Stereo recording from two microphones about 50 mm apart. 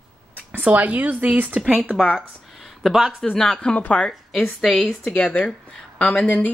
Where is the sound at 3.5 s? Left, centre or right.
Left.